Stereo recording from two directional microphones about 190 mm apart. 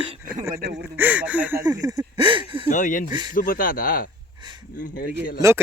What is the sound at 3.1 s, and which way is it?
Speech, 20° right (ahead or behind).